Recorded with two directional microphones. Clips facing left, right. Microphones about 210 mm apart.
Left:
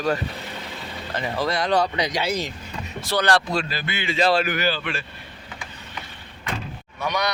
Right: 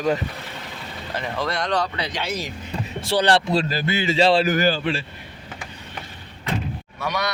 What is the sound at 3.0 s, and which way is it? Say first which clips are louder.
Speech: right 2 dB; 30° right (ahead or behind).